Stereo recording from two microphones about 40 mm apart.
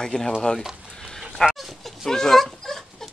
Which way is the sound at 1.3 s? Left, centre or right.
Centre.